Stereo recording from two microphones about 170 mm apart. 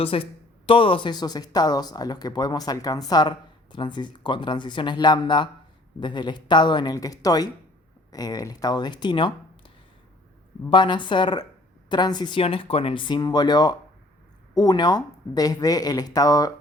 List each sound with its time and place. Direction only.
0.0 s speech: 30° left (ahead or behind)